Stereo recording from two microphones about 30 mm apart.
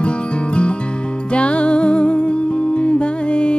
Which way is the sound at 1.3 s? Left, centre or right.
Left.